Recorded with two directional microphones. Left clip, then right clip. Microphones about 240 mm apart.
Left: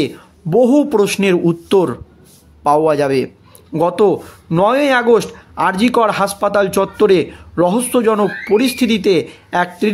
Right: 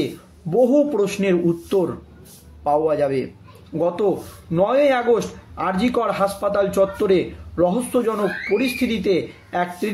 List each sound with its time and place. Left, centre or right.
0.0 s a man's voice: left